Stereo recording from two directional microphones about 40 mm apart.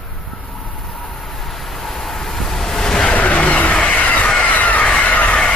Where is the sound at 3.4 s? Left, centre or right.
Left.